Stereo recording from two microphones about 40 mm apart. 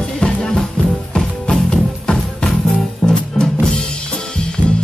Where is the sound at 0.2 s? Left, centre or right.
Left.